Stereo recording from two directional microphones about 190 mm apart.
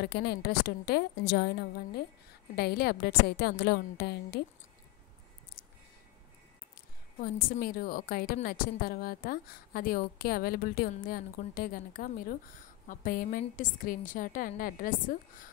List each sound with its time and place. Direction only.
0.0 s a woman's voice: 60° left (ahead or behind)
7.2 s a woman's voice: 50° left (ahead or behind)